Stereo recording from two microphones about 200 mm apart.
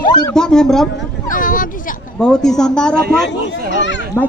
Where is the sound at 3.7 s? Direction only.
65° left (ahead or behind).